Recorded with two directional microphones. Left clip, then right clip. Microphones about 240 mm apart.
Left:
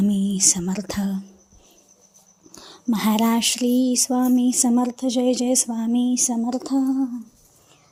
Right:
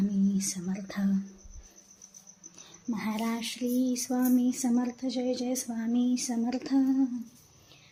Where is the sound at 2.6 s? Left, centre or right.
Left.